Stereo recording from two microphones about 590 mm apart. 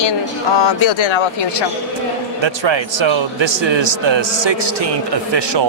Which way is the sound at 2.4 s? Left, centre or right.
Right.